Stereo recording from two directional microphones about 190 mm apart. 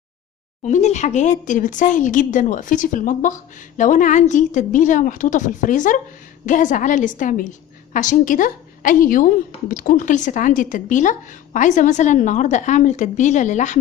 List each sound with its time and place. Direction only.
0.6 s a woman's voice: 40° left (ahead or behind)